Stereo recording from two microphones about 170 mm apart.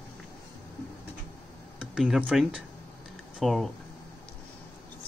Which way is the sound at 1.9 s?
5° right (ahead or behind).